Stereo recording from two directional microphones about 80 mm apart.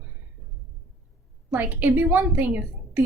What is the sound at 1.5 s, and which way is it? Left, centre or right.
A woman's voice, right.